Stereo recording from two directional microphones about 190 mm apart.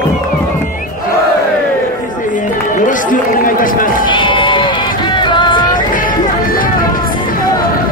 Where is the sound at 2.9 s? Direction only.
45° left (ahead or behind).